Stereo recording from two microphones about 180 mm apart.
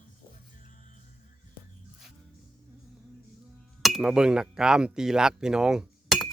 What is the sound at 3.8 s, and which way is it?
Speech, centre (ahead or behind).